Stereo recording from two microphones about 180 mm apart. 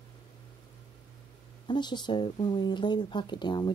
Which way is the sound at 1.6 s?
25° left (ahead or behind).